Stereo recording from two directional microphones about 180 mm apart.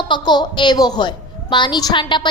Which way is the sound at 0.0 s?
25° left (ahead or behind).